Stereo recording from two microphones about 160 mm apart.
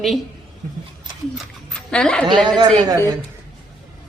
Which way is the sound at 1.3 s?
5° left (ahead or behind).